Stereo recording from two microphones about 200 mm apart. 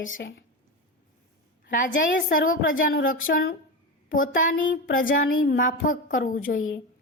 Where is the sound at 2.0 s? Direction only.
45° left (ahead or behind).